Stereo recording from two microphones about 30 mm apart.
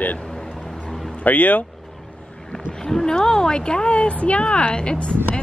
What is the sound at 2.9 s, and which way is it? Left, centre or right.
A woman's voice, centre.